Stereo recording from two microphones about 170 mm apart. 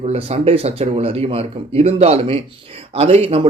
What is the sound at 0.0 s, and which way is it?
Speech, 35° right (ahead or behind).